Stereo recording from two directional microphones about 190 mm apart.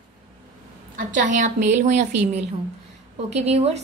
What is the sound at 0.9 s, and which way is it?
A woman's voice, 40° right (ahead or behind).